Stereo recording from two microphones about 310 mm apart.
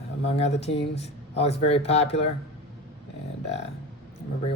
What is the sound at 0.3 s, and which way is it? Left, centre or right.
Speech, centre.